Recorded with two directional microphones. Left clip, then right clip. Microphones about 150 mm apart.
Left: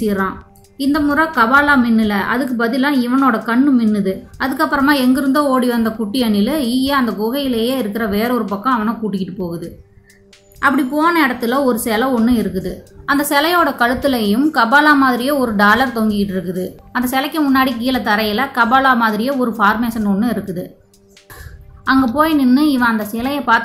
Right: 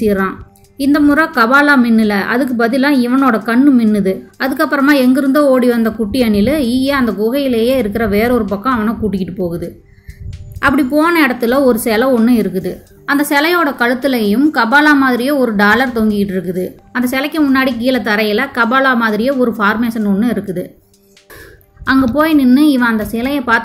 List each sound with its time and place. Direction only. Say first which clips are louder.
0.0 s a woman's voice: right 4 dB; 20° right (ahead or behind)
21.8 s a woman's voice: right 2 dB; 10° right (ahead or behind)